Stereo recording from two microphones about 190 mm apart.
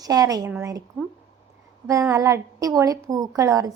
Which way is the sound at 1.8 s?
15° right (ahead or behind).